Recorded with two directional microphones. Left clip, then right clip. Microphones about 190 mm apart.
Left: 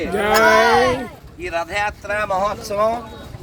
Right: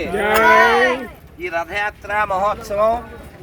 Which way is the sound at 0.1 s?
5° left (ahead or behind).